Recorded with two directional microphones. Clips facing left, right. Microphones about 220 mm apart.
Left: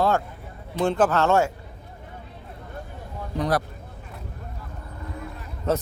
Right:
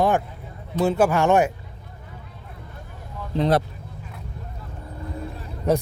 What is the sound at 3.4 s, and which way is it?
Speech, 25° right (ahead or behind).